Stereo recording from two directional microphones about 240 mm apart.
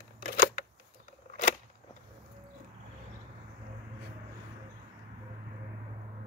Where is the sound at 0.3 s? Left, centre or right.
Left.